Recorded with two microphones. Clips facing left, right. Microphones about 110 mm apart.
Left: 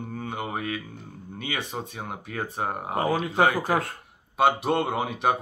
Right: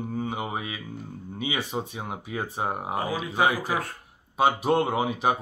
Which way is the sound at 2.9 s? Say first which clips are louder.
Left 8 dB; 50° left (ahead or behind).